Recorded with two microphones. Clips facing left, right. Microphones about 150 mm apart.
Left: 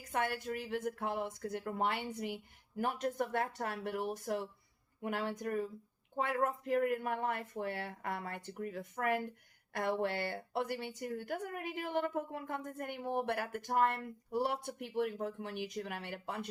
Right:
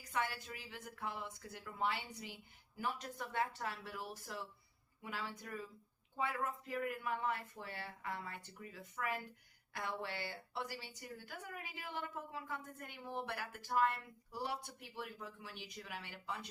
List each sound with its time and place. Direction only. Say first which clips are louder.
0.0 s a woman's voice: left 5 dB; 55° left (ahead or behind)